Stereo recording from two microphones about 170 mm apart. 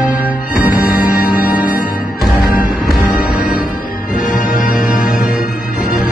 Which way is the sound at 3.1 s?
55° left (ahead or behind).